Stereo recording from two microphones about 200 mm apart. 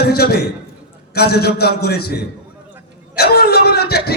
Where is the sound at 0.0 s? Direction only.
50° left (ahead or behind).